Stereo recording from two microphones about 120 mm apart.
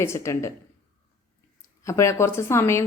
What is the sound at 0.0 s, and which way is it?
Speech, 25° left (ahead or behind).